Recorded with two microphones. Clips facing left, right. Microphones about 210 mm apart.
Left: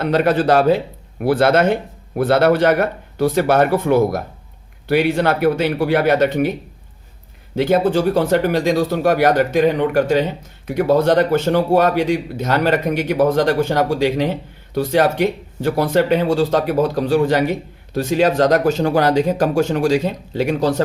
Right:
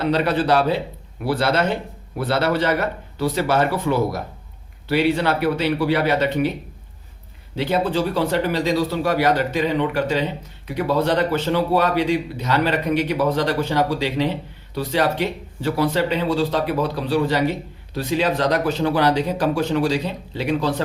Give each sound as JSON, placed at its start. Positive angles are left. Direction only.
{"t": 0.0, "sound": "speech", "side_deg": 50}
{"t": 7.5, "sound": "speech", "side_deg": 45}